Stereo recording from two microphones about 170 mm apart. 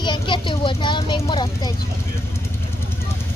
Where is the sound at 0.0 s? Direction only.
25° left (ahead or behind).